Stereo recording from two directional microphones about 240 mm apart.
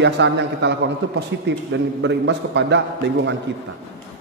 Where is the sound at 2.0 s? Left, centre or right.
Right.